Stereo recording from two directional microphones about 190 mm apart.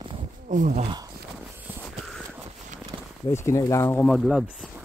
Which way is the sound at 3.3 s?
15° left (ahead or behind).